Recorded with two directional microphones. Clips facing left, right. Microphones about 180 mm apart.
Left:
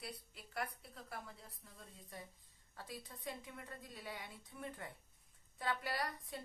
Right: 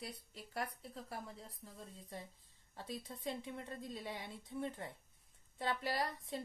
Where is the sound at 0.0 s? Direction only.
30° right (ahead or behind).